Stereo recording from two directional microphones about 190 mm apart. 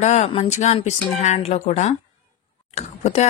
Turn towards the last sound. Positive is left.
turn(degrees=35)  # may be behind; listen again after turning